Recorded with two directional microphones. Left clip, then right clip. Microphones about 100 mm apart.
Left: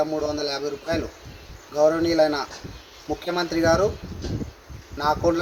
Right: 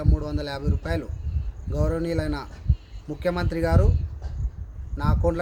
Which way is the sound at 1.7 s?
45° right (ahead or behind).